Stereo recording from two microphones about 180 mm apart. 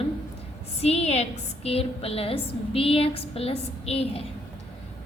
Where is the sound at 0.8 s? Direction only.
35° left (ahead or behind).